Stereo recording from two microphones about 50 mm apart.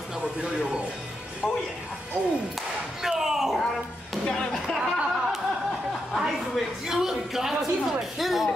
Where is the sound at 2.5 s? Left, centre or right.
Centre.